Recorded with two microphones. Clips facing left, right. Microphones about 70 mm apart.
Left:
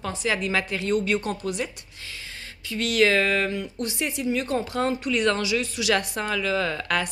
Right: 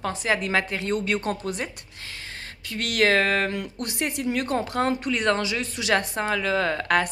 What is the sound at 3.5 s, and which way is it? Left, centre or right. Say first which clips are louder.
Speech: left 1 dB; right.